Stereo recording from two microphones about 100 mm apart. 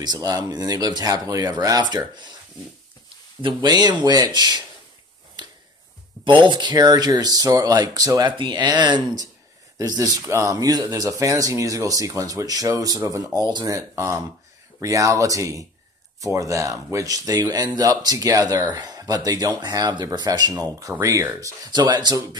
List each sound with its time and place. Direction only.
0.0 s speech: 40° right (ahead or behind)
3.4 s speech: 45° right (ahead or behind)
5.4 s a sound: 45° right (ahead or behind)
6.4 s speech: 50° right (ahead or behind)
8.3 s speech: 50° right (ahead or behind)
9.8 s speech: 35° right (ahead or behind)
21.6 s speech: 45° right (ahead or behind)